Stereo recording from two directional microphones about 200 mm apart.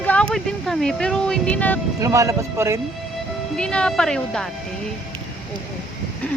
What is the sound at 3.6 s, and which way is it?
Speech, 5° left (ahead or behind).